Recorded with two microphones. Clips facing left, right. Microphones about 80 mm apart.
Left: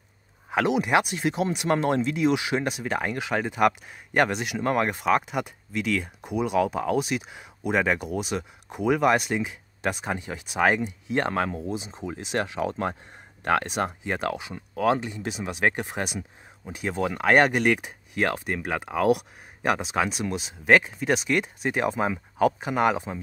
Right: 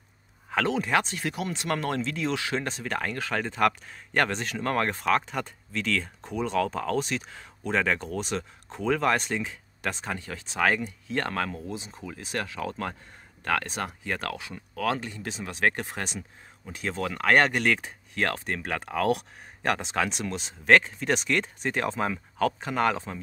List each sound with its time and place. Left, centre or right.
0.5 s speech: centre